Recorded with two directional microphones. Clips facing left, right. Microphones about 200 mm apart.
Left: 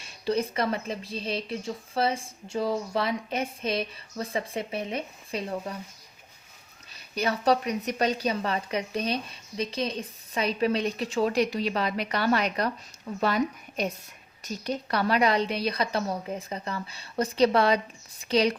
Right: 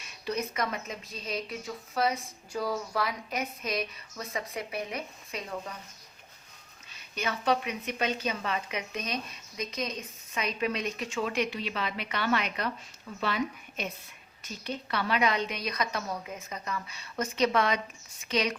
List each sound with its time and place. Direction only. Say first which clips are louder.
0.0 s speech: left 6 dB; 30° left (ahead or behind)
6.9 s a woman's voice: left 6 dB; 35° left (ahead or behind)